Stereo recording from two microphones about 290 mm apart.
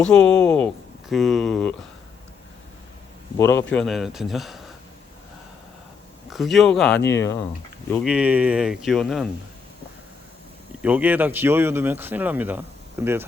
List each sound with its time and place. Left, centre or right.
0.0 s speech: centre
3.3 s speech: centre
6.3 s speech: centre
7.0 s speech: left
7.9 s speech: centre
10.8 s speech: centre